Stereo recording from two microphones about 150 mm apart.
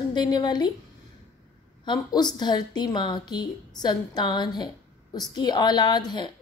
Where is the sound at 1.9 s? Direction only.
30° left (ahead or behind).